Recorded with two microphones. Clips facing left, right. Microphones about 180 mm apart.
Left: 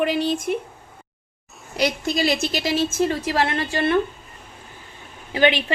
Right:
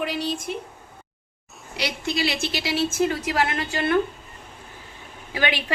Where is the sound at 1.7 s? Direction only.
45° left (ahead or behind); by 3.9 s 30° left (ahead or behind).